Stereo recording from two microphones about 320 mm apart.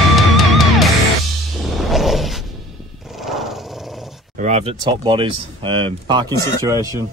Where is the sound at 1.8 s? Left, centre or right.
Centre.